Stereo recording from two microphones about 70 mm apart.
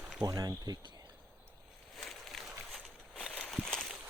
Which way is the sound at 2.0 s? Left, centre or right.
Centre.